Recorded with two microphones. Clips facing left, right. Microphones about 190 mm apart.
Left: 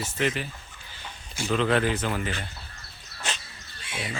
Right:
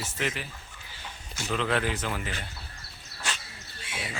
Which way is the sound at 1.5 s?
35° left (ahead or behind).